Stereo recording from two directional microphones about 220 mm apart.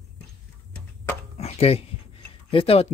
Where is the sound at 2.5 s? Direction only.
25° left (ahead or behind).